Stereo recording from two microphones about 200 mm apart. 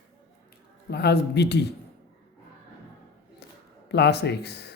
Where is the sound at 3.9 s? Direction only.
55° left (ahead or behind).